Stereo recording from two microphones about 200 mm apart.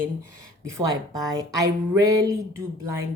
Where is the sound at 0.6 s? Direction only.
15° right (ahead or behind).